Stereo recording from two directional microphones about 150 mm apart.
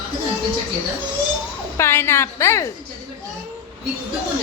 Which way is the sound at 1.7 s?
15° left (ahead or behind).